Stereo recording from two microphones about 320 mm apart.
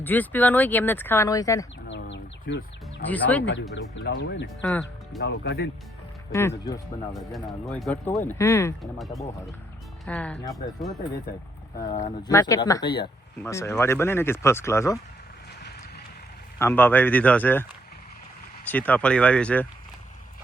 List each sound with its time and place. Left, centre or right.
0.0 s speech: centre
1.9 s bird: left
3.1 s speech: centre
3.4 s speech: left
6.3 s speech: centre
10.1 s speech: centre
12.3 s speech: centre
16.6 s speech: centre